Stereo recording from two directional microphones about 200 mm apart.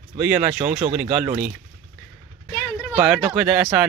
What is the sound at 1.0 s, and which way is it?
Speech, 5° right (ahead or behind).